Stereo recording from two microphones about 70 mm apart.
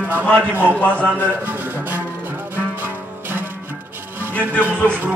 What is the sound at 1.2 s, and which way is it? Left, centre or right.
Music, right.